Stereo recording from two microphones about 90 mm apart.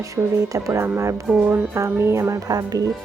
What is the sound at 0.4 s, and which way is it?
Speech, 35° right (ahead or behind).